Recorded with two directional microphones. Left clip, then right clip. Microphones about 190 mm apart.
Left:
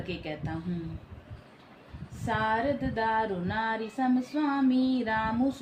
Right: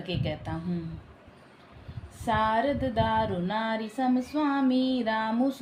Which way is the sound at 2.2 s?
45° right (ahead or behind).